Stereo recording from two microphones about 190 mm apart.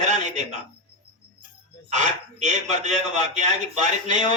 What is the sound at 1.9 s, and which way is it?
A man's voice, 40° right (ahead or behind).